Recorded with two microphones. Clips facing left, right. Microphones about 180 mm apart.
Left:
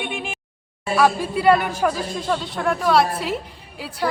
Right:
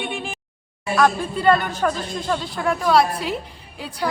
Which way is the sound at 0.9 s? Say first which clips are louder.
Left 1 dB; 10° left (ahead or behind).